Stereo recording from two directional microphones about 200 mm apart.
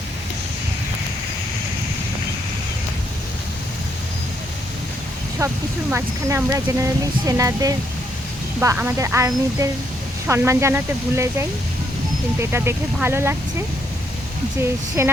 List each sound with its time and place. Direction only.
5.4 s speech: 15° right (ahead or behind)
14.6 s speech: 10° right (ahead or behind)